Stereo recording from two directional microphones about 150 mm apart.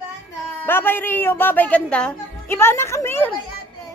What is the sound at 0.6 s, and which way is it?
A woman's voice, 15° left (ahead or behind).